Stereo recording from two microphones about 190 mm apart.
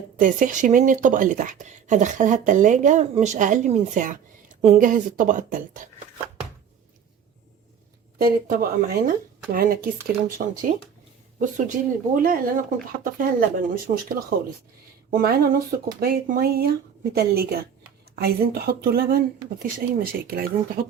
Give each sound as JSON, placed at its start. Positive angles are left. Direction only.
{"t": 0.2, "sound": "speech", "side_deg": -45}
{"t": 8.2, "sound": "speech", "side_deg": -50}
{"t": 15.1, "sound": "speech", "side_deg": -50}